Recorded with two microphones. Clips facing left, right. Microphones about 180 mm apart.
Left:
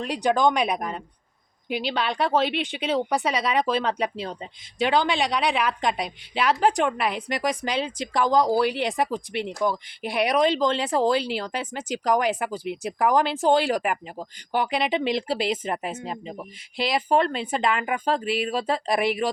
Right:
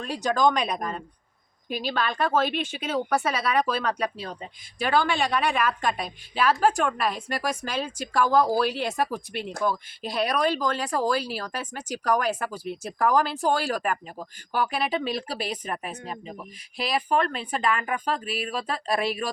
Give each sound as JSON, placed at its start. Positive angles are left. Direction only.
{"t": 0.0, "sound": "speech", "side_deg": 15}